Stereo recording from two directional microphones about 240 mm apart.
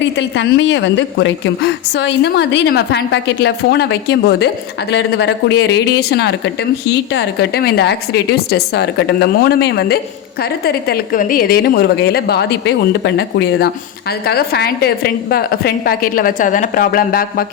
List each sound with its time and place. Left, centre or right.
0.0 s a woman's voice: left